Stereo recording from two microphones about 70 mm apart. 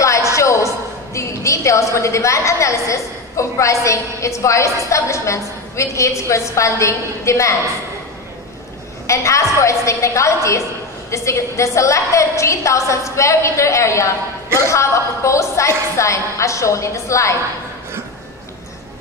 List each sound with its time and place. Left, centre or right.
0.0 s a sound: left
1.1 s a woman's voice: left
9.0 s a woman's voice: left